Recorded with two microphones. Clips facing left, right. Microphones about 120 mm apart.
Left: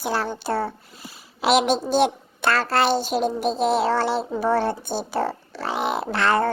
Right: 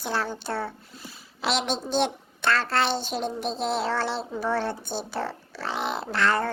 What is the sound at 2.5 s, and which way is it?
Child singing, 10° left (ahead or behind).